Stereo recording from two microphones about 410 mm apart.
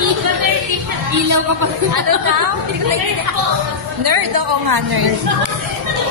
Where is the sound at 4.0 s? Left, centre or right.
Right.